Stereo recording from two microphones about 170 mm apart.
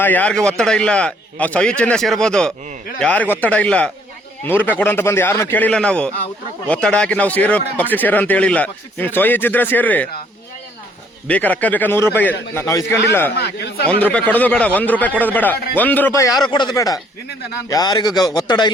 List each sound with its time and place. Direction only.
0.0 s a man's voice: 10° left (ahead or behind)
11.3 s speech: 10° left (ahead or behind)
13.3 s speech: 75° left (ahead or behind)
13.8 s speech: 5° left (ahead or behind)
16.5 s speech: 25° left (ahead or behind)